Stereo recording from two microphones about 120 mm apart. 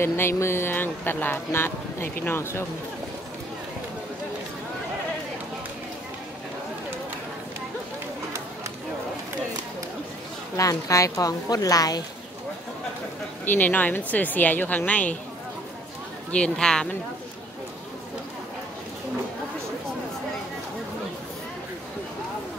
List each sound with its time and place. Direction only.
0.0 s speech: 20° left (ahead or behind)
10.5 s speech: 30° left (ahead or behind)
13.5 s a woman's voice: 15° left (ahead or behind)
16.3 s a woman's voice: 10° left (ahead or behind)